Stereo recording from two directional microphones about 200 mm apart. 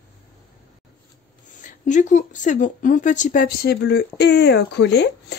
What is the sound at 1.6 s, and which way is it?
A woman's voice, 40° left (ahead or behind).